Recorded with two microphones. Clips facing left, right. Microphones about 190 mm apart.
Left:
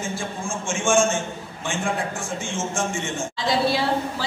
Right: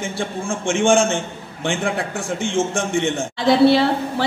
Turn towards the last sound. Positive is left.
turn(degrees=-65)  # may be behind; listen again after turning